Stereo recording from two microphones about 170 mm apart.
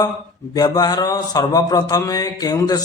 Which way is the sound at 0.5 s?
20° left (ahead or behind).